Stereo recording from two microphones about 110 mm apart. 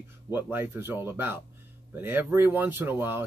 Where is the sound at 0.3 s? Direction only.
20° right (ahead or behind).